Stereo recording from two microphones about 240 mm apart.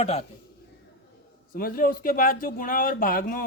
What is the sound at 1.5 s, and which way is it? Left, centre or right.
Speech, left.